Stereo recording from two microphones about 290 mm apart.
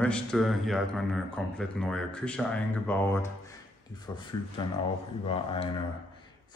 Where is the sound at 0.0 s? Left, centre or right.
Centre.